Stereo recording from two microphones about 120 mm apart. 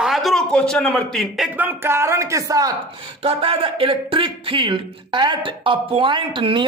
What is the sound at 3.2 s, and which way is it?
Speech, 50° right (ahead or behind).